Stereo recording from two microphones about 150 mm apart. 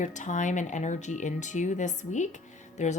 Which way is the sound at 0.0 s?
55° left (ahead or behind).